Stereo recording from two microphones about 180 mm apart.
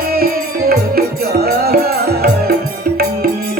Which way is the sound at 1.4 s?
60° right (ahead or behind).